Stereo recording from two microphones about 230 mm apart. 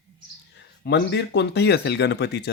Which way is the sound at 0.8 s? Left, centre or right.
Left.